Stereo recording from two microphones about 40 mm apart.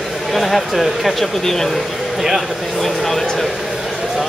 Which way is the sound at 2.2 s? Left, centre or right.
Centre.